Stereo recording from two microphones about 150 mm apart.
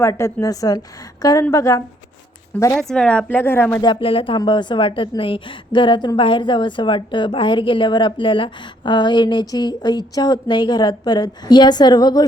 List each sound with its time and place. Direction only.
0.0 s a woman's voice: 20° left (ahead or behind)
2.8 s speech: 5° left (ahead or behind)
3.8 s a woman's voice: 35° left (ahead or behind)